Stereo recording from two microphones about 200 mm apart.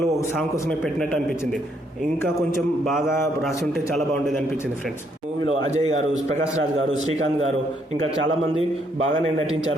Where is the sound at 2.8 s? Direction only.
Centre (ahead or behind).